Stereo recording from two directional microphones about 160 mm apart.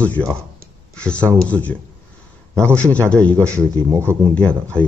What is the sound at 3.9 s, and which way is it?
Speech, 15° right (ahead or behind).